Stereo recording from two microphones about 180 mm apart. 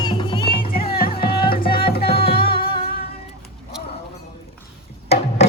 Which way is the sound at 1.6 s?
55° left (ahead or behind).